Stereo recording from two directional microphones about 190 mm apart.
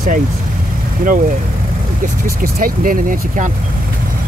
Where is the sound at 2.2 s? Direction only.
50° right (ahead or behind).